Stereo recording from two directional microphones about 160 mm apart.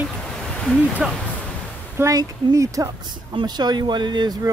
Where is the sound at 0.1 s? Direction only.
5° left (ahead or behind).